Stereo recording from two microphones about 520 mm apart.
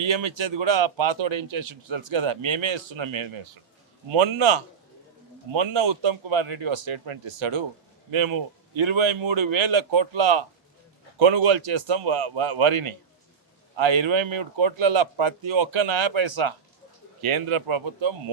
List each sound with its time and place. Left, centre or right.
0.1 s speech: right
17.2 s speech: right